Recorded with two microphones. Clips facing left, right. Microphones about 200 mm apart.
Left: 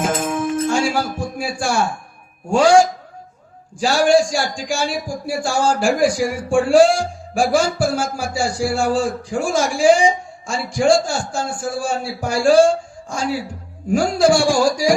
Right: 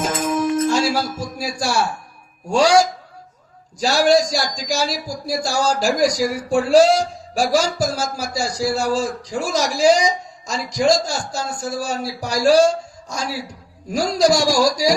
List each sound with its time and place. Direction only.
0.6 s music: 40° right (ahead or behind)
2.5 s a man's voice: 40° right (ahead or behind)
13.9 s a man's voice: 40° right (ahead or behind)